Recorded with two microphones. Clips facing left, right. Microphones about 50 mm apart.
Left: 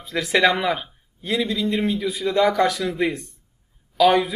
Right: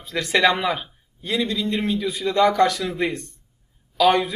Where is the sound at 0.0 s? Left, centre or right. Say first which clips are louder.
Even; centre.